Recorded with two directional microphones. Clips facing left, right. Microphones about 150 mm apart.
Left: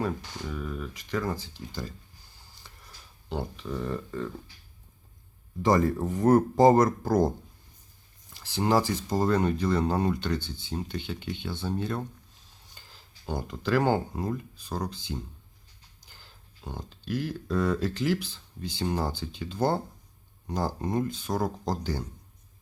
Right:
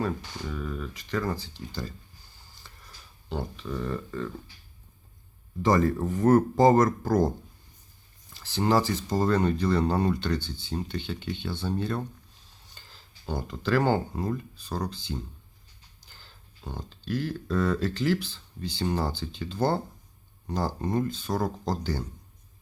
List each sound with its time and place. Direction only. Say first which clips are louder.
0.0 s speech: right 1 dB; 10° left (ahead or behind)
2.6 s a sound: right 1 dB; 15° left (ahead or behind)
3.2 s speech: even; 15° left (ahead or behind)
5.6 s speech: even; 20° left (ahead or behind)
8.3 s a sound: right 1 dB; 15° left (ahead or behind)
8.9 s speech: even; 10° left (ahead or behind)